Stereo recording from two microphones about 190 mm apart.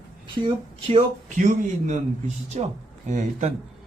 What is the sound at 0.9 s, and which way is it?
A man's voice, 40° right (ahead or behind).